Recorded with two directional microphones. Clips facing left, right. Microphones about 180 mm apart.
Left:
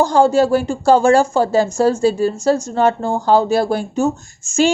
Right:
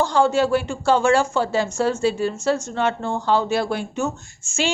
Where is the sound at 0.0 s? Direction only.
40° left (ahead or behind).